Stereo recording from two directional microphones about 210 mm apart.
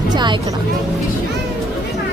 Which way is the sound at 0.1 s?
20° right (ahead or behind).